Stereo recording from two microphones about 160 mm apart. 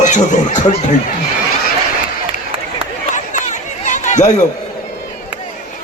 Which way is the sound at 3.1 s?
50° left (ahead or behind).